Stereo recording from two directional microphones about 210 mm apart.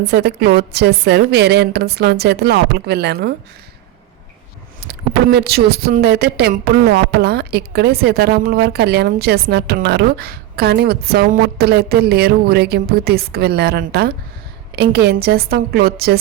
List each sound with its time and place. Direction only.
0.0 s a woman's voice: 50° right (ahead or behind)
4.8 s a woman's voice: 50° right (ahead or behind)